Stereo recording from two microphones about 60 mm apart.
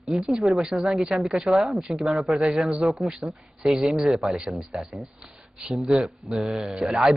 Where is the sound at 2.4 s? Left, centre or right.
Centre.